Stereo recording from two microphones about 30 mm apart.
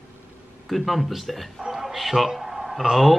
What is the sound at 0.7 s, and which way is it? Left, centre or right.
Speech, centre.